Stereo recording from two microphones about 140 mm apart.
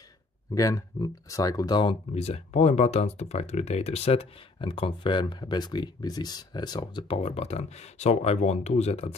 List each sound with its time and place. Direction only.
0.6 s speech: 25° left (ahead or behind)
2.1 s speech: 50° left (ahead or behind)